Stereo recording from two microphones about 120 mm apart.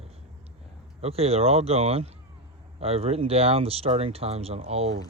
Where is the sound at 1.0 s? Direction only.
55° right (ahead or behind).